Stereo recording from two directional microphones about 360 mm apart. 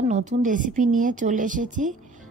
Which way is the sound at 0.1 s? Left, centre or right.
Right.